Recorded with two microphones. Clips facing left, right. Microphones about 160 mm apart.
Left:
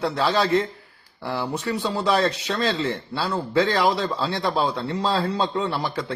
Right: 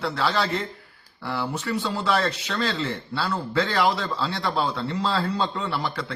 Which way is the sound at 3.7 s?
20° left (ahead or behind).